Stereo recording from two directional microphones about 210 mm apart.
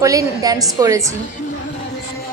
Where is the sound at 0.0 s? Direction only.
15° right (ahead or behind).